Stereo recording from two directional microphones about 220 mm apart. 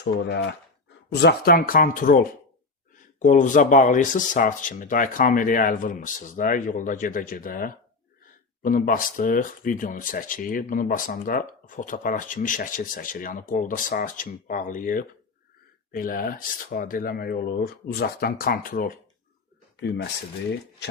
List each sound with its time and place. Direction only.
0.0 s speech: 55° left (ahead or behind)